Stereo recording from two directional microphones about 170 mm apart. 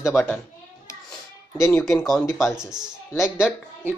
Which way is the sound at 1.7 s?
Centre (ahead or behind).